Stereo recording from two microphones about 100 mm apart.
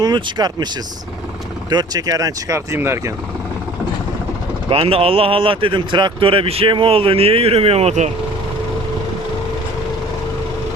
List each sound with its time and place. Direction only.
0.0 s speech: 45° right (ahead or behind)
1.7 s speech: 40° right (ahead or behind)
2.7 s speech: 25° right (ahead or behind)
4.7 s speech: 70° right (ahead or behind); by 8.1 s 90° right